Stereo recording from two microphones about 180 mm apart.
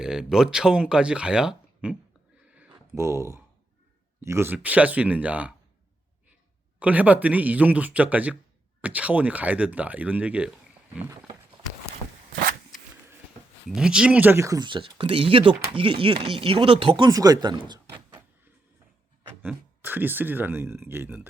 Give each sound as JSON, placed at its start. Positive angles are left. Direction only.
{"t": 0.0, "sound": "speech", "side_deg": -5}
{"t": 2.6, "sound": "a sound", "side_deg": -15}
{"t": 4.2, "sound": "speech", "side_deg": -15}
{"t": 6.7, "sound": "speech", "side_deg": -10}
{"t": 13.7, "sound": "speech", "side_deg": -5}
{"t": 19.4, "sound": "speech", "side_deg": -10}